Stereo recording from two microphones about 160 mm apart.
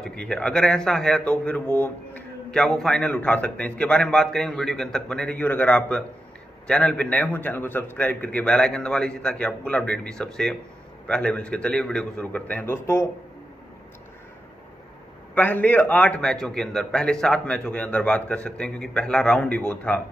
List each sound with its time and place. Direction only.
0.0 s a man's voice: 5° left (ahead or behind)
15.3 s a man's voice: 10° left (ahead or behind)